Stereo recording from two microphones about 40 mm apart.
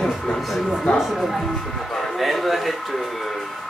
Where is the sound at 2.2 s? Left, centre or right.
Centre.